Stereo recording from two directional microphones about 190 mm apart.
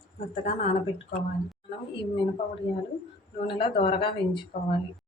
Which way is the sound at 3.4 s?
25° left (ahead or behind).